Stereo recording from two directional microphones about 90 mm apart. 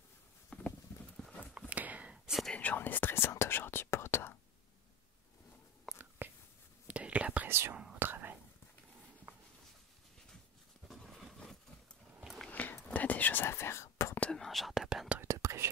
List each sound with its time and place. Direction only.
0.5 s clip-clop: 15° left (ahead or behind)
1.5 s a sound: 15° right (ahead or behind)
2.5 s whispering: 20° left (ahead or behind)
5.9 s whispering: centre (ahead or behind)
6.9 s whispering: 15° right (ahead or behind)
10.9 s a sound: centre (ahead or behind)
12.4 s whispering: 15° left (ahead or behind)
14.2 s whispering: 5° left (ahead or behind)
15.3 s whispering: 35° right (ahead or behind)